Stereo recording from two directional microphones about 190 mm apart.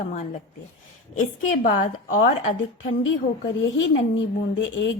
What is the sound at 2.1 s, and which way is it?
Speech, 40° left (ahead or behind).